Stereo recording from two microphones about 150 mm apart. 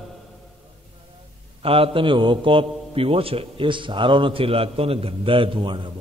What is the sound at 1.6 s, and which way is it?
A man's voice, 40° right (ahead or behind).